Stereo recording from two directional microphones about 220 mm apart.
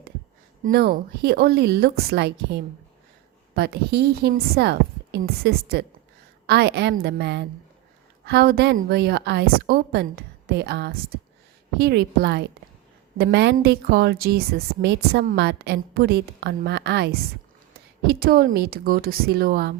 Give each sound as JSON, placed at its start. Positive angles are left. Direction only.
{"t": 0.6, "sound": "a woman's voice", "side_deg": -45}